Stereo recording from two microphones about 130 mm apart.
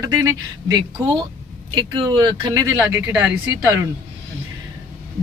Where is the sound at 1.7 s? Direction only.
35° right (ahead or behind).